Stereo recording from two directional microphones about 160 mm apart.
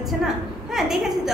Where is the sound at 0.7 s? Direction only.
Centre (ahead or behind).